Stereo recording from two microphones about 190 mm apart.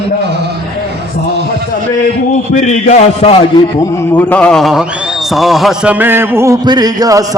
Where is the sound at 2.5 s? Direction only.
40° left (ahead or behind).